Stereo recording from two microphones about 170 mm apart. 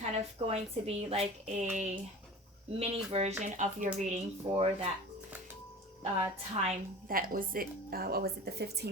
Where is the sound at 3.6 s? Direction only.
45° right (ahead or behind).